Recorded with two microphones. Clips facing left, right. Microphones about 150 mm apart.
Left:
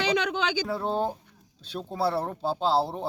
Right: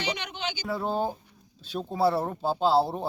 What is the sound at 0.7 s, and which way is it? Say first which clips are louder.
Speech: left 1 dB; centre (ahead or behind).